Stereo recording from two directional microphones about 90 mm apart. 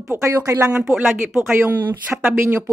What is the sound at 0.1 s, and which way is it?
Speech, 25° right (ahead or behind).